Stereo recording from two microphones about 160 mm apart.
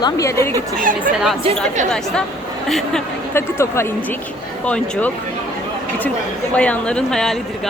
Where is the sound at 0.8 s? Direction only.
60° right (ahead or behind).